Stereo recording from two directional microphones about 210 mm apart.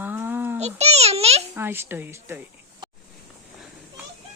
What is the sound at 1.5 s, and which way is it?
Speech, 10° right (ahead or behind).